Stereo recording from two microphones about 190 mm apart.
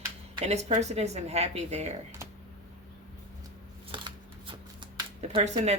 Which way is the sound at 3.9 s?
25° right (ahead or behind).